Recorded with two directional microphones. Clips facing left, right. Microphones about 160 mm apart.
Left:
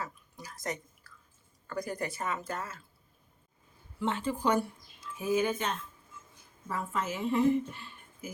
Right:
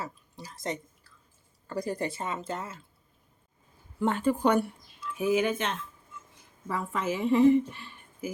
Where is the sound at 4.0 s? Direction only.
50° right (ahead or behind).